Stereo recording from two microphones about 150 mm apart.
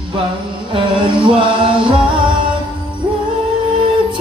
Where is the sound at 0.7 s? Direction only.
35° right (ahead or behind).